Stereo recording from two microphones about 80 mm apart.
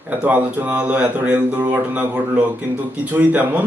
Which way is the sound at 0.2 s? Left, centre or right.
Centre.